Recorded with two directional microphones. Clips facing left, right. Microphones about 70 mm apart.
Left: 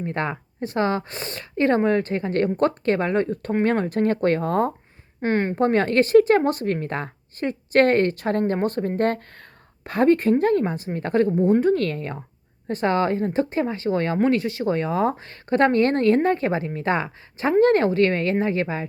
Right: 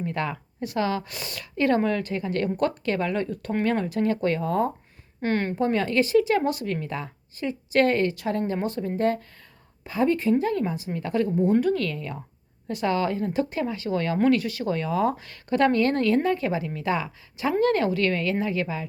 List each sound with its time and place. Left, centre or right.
0.0 s speech: left
5.2 s speech: left
5.5 s speech: left